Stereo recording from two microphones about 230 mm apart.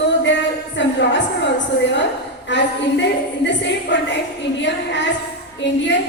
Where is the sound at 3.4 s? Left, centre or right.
Left.